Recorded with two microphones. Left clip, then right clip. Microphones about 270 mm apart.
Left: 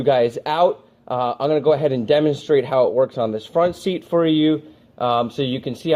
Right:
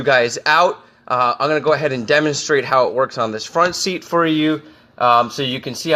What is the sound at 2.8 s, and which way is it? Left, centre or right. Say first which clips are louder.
Speech: even; centre.